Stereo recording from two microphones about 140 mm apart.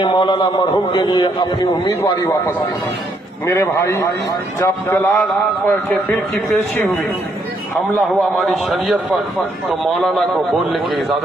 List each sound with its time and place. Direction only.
0.0 s a man's voice: 35° left (ahead or behind)
3.4 s a man's voice: 20° left (ahead or behind)
5.6 s speech: 5° left (ahead or behind)
8.4 s speech: centre (ahead or behind)
10.7 s speech: centre (ahead or behind)